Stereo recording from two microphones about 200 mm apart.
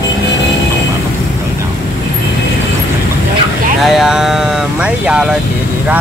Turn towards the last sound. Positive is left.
turn(degrees=-5)  # may be behind; listen again after turning